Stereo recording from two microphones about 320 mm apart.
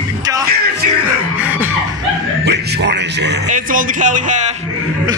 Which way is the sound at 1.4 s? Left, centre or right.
Centre.